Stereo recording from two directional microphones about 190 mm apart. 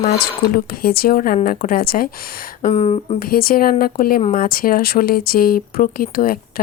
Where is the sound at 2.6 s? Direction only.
35° left (ahead or behind).